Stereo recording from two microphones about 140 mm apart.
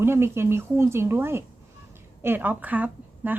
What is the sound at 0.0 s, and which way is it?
A woman's voice, 15° right (ahead or behind).